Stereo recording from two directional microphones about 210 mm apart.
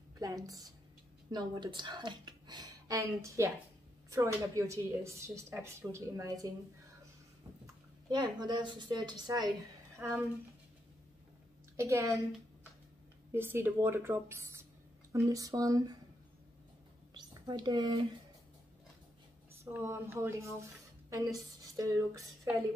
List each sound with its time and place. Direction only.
0.2 s a woman's voice: 15° right (ahead or behind)
8.1 s a woman's voice: 20° right (ahead or behind)
11.7 s a woman's voice: 15° right (ahead or behind)
13.3 s a woman's voice: 10° right (ahead or behind)
17.1 s a sound: 20° right (ahead or behind)
19.6 s a woman's voice: 10° right (ahead or behind)